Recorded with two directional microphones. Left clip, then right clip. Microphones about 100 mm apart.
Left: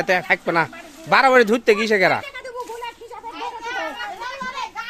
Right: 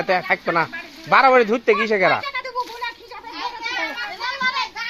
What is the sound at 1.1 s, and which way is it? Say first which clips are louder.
Speech: even; 90° left.